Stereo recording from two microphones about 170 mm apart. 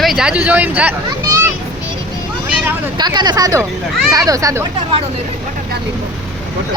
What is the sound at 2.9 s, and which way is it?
Speech, 25° right (ahead or behind).